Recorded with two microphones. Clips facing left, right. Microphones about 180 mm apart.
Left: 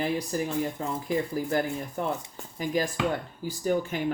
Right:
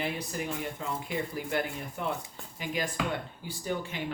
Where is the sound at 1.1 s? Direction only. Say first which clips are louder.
Left 8 dB; 40° left (ahead or behind).